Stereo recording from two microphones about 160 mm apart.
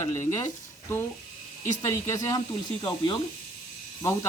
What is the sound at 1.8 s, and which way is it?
Speech, 20° left (ahead or behind).